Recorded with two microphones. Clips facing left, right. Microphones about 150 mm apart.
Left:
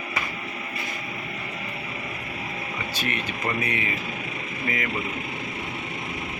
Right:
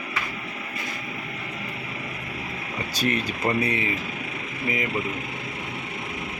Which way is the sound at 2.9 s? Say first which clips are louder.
Right 7 dB; 40° right (ahead or behind).